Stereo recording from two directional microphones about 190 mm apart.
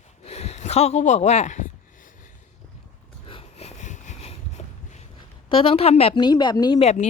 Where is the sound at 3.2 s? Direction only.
30° left (ahead or behind).